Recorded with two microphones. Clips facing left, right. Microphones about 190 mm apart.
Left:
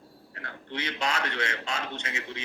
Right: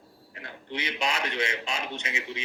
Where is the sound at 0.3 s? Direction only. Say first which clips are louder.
Even; 15° right (ahead or behind).